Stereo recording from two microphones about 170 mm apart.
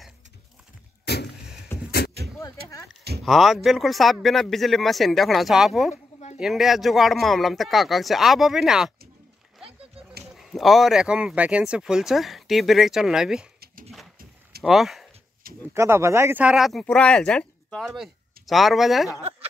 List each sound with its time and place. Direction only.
1.0 s a sound: 75° left (ahead or behind)
3.3 s speech: centre (ahead or behind)
9.6 s a sound: 35° right (ahead or behind)
10.2 s speech: centre (ahead or behind)
14.6 s speech: centre (ahead or behind)
15.7 s speech: 15° right (ahead or behind)